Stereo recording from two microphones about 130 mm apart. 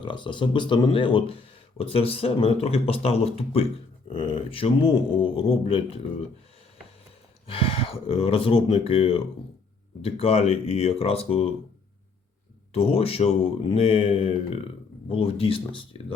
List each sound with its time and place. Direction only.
0.0 s speech: 40° left (ahead or behind)
7.4 s speech: 45° left (ahead or behind)
12.7 s speech: 45° left (ahead or behind)